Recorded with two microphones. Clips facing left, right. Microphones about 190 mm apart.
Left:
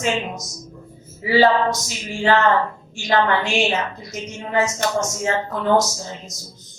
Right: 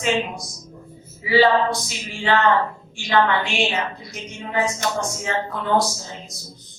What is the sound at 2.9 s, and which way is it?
A woman's voice, 45° left (ahead or behind).